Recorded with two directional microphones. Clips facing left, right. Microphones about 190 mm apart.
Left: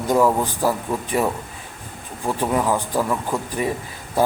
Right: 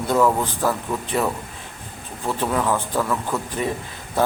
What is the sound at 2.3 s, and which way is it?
Speech, 15° left (ahead or behind).